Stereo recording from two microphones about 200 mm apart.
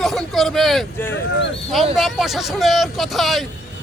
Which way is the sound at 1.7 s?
Centre (ahead or behind).